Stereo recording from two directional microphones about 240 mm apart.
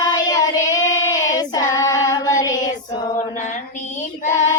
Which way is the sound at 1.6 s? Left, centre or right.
Centre.